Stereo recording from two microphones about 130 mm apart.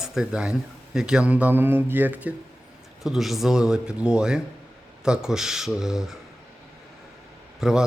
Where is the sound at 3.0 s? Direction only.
Centre (ahead or behind).